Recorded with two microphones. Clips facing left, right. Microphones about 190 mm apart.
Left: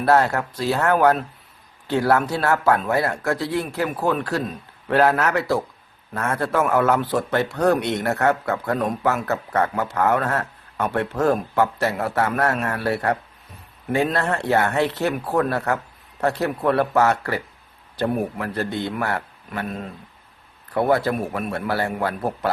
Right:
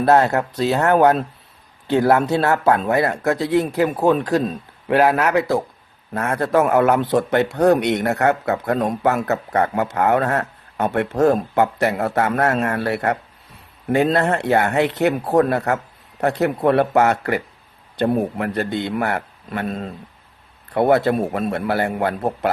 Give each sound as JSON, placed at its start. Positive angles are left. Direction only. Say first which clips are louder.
{"t": 0.0, "sound": "speech", "louder": "right 3 dB", "side_deg": -20}